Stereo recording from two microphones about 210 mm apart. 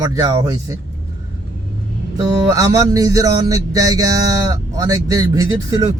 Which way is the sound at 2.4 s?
15° right (ahead or behind).